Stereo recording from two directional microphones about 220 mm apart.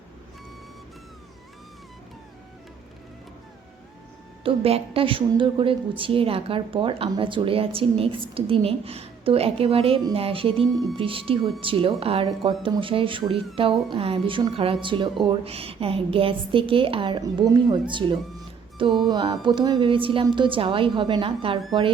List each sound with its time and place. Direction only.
4.4 s a woman's voice: 25° right (ahead or behind)
10.7 s speech: centre (ahead or behind)
10.9 s a woman's voice: 25° right (ahead or behind)
18.9 s speech: centre (ahead or behind)
19.1 s a woman's voice: 20° right (ahead or behind)